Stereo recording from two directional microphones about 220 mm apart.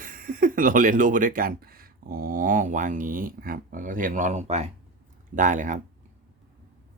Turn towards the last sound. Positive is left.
turn(degrees=-35)  # may be behind; listen again after turning